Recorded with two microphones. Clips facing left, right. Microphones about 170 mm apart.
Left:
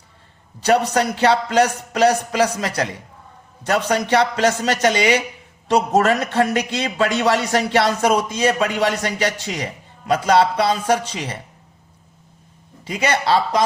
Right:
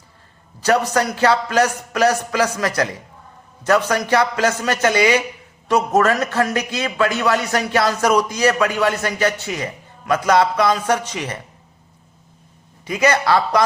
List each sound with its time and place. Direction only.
0.9 s speech: 30° left (ahead or behind)
12.8 s speech: 30° left (ahead or behind)